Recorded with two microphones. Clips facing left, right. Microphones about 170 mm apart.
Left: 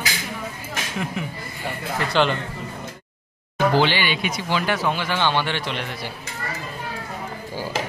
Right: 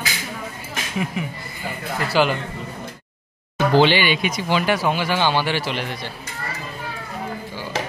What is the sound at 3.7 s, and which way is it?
Speech, 15° right (ahead or behind).